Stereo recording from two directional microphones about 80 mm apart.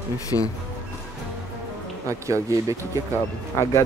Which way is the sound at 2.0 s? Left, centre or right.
Right.